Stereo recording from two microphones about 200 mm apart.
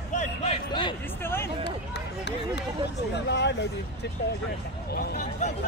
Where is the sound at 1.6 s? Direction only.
60° left (ahead or behind).